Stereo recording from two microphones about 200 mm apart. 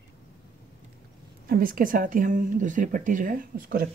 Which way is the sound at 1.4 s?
45° right (ahead or behind).